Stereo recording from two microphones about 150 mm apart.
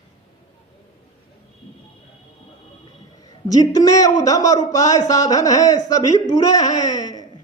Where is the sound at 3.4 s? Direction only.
25° left (ahead or behind).